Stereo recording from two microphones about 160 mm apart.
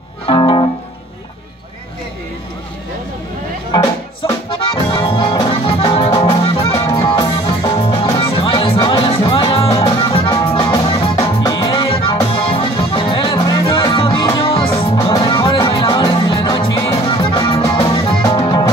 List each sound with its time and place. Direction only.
0.3 s music: 30° left (ahead or behind)
4.5 s music: 30° left (ahead or behind)